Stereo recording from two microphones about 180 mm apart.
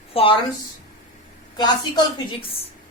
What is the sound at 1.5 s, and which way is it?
Speech, 25° left (ahead or behind).